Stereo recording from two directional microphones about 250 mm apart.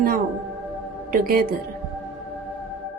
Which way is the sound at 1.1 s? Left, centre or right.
Right.